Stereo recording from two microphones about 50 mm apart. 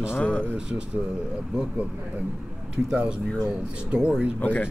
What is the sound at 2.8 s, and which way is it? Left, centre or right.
Speech, centre.